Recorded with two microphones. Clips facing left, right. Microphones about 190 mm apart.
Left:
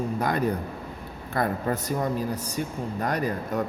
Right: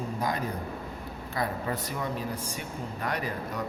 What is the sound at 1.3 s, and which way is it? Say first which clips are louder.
Speech: left 5 dB; 50° left (ahead or behind).